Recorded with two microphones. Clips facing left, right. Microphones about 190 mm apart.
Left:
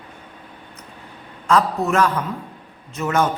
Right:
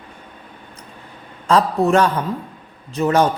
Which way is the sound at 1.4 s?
30° right (ahead or behind).